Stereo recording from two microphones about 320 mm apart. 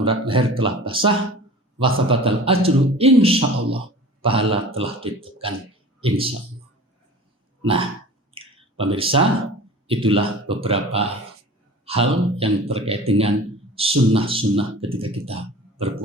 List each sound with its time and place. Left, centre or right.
0.0 s speech: centre
7.6 s throat clearing: centre
8.4 s a sound: centre
8.9 s speech: centre